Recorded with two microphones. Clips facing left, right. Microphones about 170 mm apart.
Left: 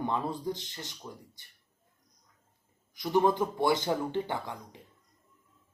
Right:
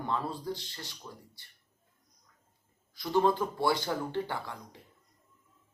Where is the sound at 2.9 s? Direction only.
20° left (ahead or behind).